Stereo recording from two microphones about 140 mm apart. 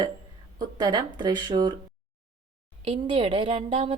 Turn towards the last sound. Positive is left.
turn(degrees=-40)  # may be behind; listen again after turning